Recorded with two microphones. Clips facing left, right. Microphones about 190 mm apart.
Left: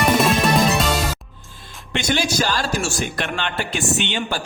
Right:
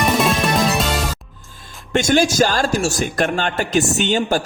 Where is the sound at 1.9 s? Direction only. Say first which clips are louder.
Right 6 dB; 45° right (ahead or behind).